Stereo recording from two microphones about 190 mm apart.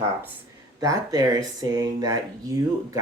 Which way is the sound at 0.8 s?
20° right (ahead or behind).